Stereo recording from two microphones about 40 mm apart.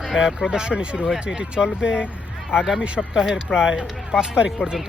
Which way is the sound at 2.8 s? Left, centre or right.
Right.